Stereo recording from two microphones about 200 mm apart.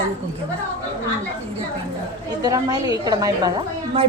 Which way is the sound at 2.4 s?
20° right (ahead or behind).